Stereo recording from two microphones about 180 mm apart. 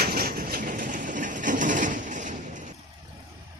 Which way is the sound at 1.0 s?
45° right (ahead or behind).